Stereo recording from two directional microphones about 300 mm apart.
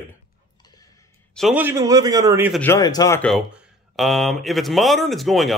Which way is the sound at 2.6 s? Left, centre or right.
Centre.